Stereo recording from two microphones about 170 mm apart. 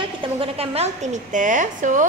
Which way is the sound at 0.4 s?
35° right (ahead or behind).